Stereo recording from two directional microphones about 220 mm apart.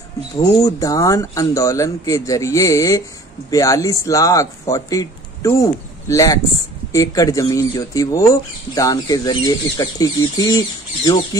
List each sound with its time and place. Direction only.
0.4 s speech: 15° left (ahead or behind)